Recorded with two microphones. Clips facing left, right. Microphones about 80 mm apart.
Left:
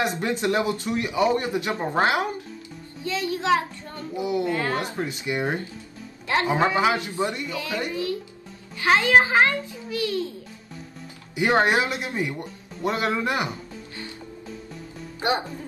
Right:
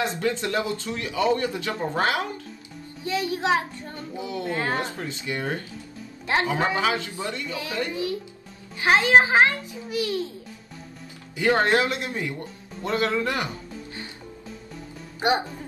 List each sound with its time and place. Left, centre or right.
0.2 s speech: left
3.0 s a child's voice: right
4.2 s speech: left
4.5 s a child's voice: right
4.8 s speech: left
7.9 s a child's voice: right
11.3 s speech: left
15.1 s speech: right